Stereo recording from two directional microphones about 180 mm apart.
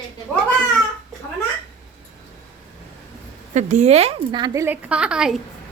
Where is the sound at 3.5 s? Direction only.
40° right (ahead or behind); by 5.4 s 5° right (ahead or behind).